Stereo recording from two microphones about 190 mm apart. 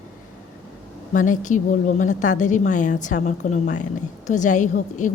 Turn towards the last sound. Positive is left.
turn(degrees=40)  # may be behind; listen again after turning